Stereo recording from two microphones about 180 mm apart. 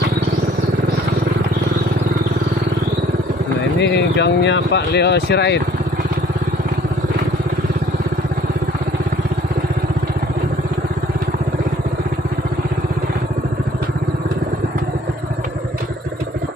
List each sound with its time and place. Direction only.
3.7 s speech: 70° left (ahead or behind)